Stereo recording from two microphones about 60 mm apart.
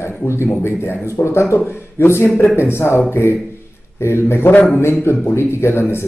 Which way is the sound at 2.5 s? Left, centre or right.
Left.